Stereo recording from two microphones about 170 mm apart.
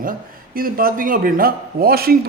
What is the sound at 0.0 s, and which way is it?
A man's voice, 55° right (ahead or behind).